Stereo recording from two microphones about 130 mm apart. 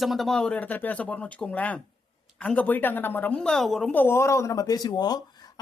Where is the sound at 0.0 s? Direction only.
Centre (ahead or behind).